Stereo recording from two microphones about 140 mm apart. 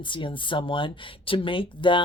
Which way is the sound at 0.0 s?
35° left (ahead or behind).